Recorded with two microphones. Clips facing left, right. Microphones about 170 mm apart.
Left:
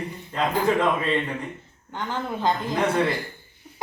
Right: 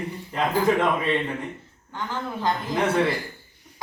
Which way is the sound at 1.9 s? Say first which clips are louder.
Left 2 dB; 20° left (ahead or behind).